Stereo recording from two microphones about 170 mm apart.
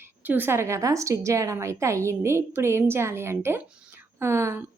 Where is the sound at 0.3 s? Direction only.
10° right (ahead or behind).